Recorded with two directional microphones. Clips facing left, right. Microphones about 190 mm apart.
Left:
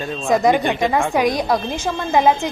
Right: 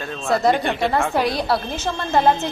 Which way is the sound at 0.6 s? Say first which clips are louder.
Left 2 dB; centre (ahead or behind).